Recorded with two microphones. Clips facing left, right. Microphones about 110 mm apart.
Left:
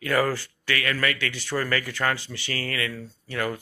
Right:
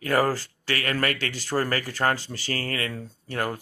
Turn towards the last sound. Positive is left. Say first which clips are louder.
# even
turn(degrees=-40)  # may be behind; listen again after turning